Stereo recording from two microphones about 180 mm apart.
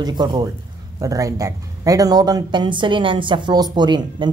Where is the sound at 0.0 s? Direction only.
20° right (ahead or behind).